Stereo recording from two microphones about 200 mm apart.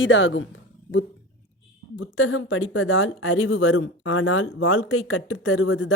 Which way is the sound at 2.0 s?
85° left.